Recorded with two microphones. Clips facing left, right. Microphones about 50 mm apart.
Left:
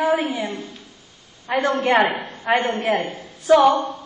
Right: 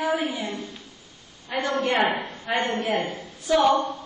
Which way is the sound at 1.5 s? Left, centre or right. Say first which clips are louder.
Left 6 dB; left.